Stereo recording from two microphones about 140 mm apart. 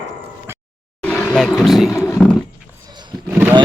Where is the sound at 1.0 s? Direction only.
10° left (ahead or behind).